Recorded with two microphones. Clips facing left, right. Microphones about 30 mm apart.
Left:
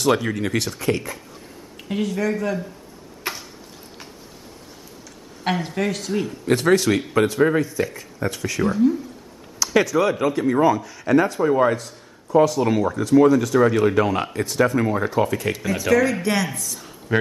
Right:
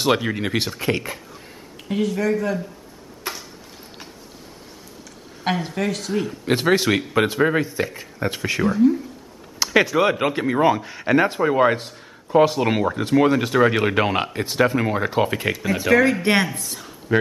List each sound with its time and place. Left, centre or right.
0.0 s a man's voice: right
1.9 s speech: centre
3.3 s a sound: centre
5.4 s speech: centre
6.6 s a man's voice: right
8.6 s speech: centre
9.6 s speech: right
15.4 s a man's voice: centre; by 16.8 s right
17.1 s speech: centre